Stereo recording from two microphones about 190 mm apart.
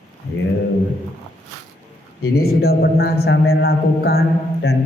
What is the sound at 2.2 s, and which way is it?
A man's voice, 55° left (ahead or behind).